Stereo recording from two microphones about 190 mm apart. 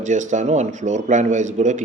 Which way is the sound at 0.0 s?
40° right (ahead or behind).